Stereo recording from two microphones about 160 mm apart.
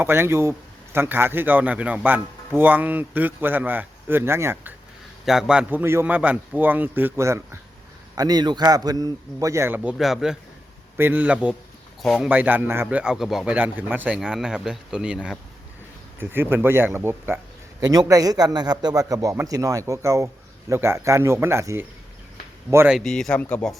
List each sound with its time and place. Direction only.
0.0 s a man's voice: 15° right (ahead or behind)
5.2 s a man's voice: 5° right (ahead or behind)
10.0 s a man's voice: centre (ahead or behind)
12.3 s a man's voice: 10° right (ahead or behind)
22.9 s speech: centre (ahead or behind)